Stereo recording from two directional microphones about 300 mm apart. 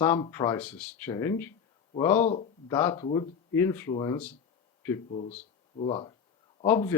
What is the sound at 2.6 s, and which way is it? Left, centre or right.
Speech, centre.